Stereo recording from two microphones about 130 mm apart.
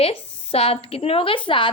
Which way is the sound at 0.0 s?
50° left (ahead or behind).